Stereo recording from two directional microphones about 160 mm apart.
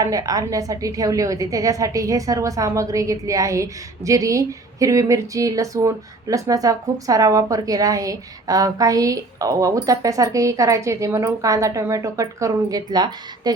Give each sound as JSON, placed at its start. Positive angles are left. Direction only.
{"t": 0.0, "sound": "a woman's voice", "side_deg": -20}